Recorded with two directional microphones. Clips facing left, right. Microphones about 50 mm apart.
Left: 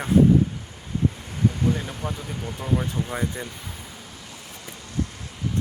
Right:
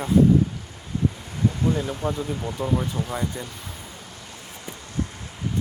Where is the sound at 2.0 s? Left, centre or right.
Centre.